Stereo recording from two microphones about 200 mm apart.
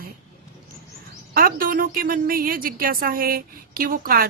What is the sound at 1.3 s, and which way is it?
A woman's voice, 45° right (ahead or behind).